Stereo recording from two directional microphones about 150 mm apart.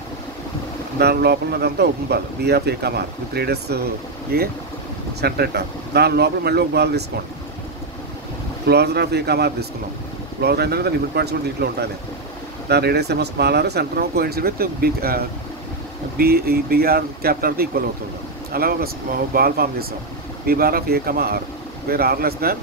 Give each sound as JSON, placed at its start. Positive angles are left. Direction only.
{"t": 0.9, "sound": "speech", "side_deg": -90}
{"t": 8.6, "sound": "speech", "side_deg": -90}